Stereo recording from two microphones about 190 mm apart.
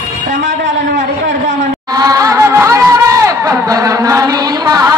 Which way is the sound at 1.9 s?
20° right (ahead or behind).